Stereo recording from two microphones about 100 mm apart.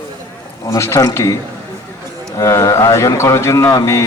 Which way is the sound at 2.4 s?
30° left (ahead or behind).